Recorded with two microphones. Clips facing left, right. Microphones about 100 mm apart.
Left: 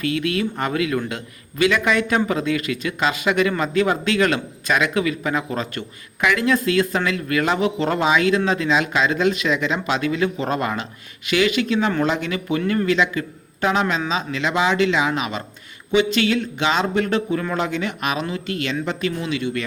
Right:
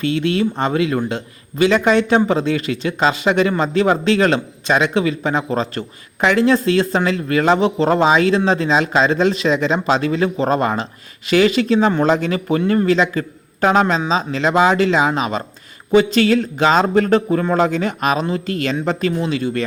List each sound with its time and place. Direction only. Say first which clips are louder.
0.0 s a man's voice: right 4 dB; 30° right (ahead or behind)